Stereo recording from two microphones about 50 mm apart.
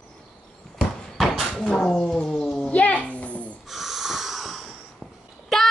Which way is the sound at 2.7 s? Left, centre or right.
Left.